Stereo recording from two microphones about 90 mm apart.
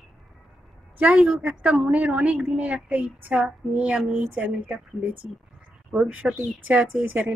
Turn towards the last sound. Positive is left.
turn(degrees=-20)  # may be behind; listen again after turning